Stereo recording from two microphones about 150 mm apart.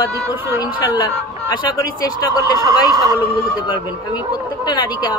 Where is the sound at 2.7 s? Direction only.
25° left (ahead or behind).